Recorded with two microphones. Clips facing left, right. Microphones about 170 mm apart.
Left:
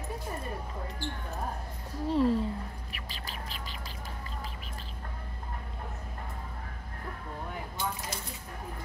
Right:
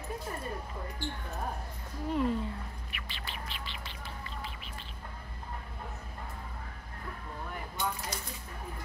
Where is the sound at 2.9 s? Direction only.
40° left (ahead or behind).